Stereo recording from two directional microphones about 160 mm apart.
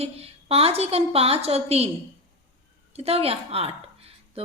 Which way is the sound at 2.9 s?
40° right (ahead or behind).